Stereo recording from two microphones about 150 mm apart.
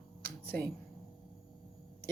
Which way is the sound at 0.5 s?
5° left (ahead or behind).